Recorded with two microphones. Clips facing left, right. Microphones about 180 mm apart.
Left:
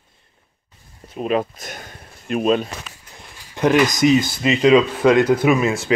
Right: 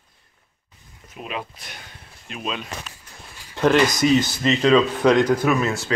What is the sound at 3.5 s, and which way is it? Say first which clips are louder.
Speech: left 1 dB; 15° left (ahead or behind).